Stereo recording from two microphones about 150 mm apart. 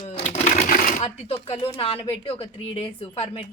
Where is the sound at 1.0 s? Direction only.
40° left (ahead or behind).